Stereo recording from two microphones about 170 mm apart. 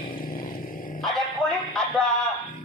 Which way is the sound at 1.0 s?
5° left (ahead or behind).